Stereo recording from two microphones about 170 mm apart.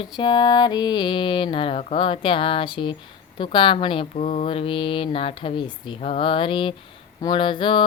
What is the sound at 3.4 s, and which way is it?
Mantra, 30° left (ahead or behind).